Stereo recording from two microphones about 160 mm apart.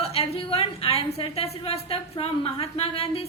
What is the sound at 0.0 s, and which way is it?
A woman's voice, 40° left (ahead or behind).